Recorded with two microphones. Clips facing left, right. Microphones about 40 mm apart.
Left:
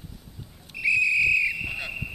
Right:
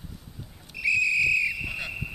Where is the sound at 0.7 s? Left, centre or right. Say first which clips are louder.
Left 2 dB; centre.